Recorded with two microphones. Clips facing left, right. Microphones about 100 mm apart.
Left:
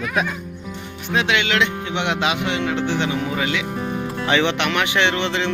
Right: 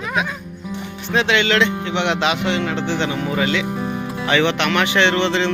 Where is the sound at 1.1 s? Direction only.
5° left (ahead or behind).